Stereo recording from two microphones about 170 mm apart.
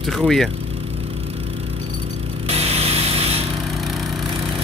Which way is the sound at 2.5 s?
35° right (ahead or behind).